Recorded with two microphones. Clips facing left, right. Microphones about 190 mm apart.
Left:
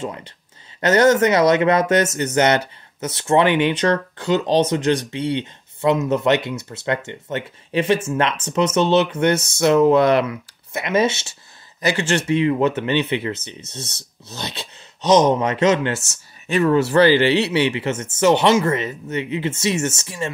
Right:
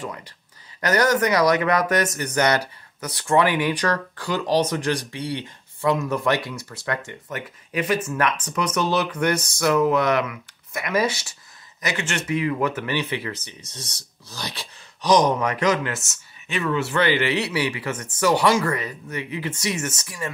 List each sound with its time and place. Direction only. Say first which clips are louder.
0.0 s speech: left 4 dB; 25° left (ahead or behind)